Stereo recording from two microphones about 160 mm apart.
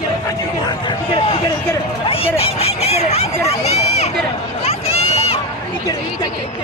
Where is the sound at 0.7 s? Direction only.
35° left (ahead or behind).